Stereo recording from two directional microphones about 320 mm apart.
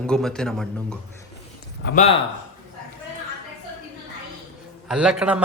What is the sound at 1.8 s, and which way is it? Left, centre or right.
Speech, left.